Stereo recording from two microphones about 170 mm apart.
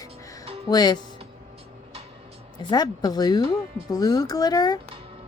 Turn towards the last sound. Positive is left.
turn(degrees=25)  # may be behind; listen again after turning